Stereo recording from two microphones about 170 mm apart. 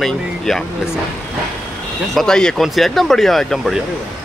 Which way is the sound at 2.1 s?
5° left (ahead or behind).